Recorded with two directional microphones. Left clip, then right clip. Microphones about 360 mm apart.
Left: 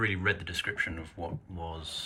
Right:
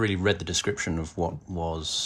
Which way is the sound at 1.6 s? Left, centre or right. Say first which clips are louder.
Right 9 dB; centre.